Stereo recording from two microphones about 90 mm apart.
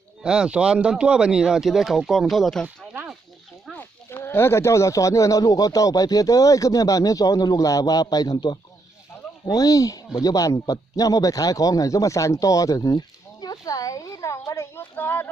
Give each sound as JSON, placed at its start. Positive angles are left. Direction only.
{"t": 0.2, "sound": "speech", "side_deg": -10}
{"t": 2.6, "sound": "a sound", "side_deg": -15}
{"t": 3.8, "sound": "a man's voice", "side_deg": 25}